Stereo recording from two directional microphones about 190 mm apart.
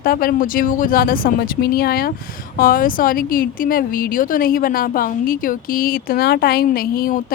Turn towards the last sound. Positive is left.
turn(degrees=50)  # may be behind; listen again after turning